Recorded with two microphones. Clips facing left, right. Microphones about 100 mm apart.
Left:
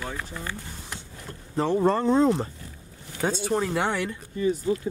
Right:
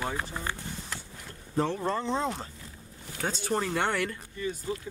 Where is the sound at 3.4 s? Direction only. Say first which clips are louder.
Left 1 dB; 5° left (ahead or behind).